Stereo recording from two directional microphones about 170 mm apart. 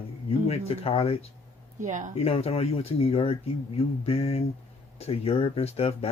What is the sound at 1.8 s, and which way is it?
Speech, 45° right (ahead or behind).